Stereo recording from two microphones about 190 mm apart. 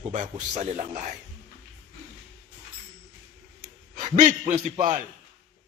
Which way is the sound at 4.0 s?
35° right (ahead or behind).